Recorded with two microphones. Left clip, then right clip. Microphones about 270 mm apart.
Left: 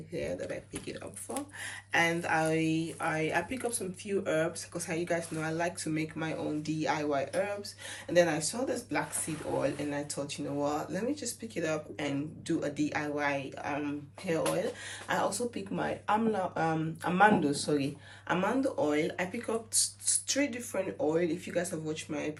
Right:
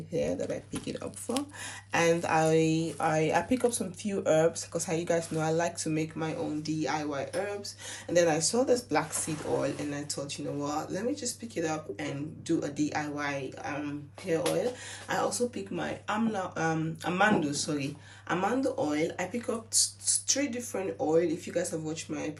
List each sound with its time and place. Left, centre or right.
0.1 s speech: centre